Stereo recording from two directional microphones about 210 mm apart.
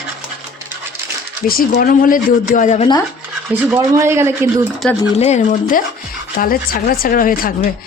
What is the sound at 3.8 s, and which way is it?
Speech, 15° right (ahead or behind).